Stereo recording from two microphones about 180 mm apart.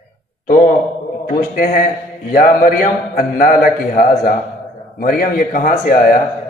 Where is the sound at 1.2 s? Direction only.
55° left (ahead or behind).